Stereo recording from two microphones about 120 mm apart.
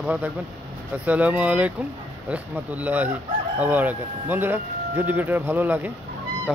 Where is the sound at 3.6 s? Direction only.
15° right (ahead or behind).